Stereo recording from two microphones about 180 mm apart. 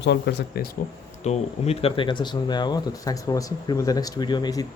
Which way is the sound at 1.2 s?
35° left (ahead or behind).